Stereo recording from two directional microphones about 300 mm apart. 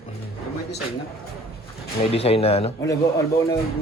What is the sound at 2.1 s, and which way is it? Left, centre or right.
Speech, centre.